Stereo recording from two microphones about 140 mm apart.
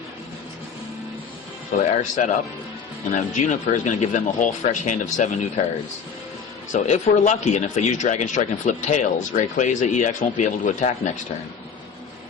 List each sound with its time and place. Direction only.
2.2 s speech: 70° left (ahead or behind)
6.7 s speech: 55° left (ahead or behind)